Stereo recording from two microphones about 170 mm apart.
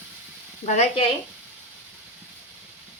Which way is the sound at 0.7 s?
40° left (ahead or behind).